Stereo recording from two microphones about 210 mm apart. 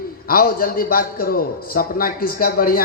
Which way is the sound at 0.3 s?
45° left (ahead or behind).